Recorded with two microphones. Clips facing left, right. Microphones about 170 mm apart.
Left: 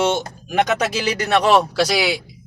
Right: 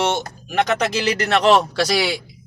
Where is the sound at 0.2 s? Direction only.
10° left (ahead or behind).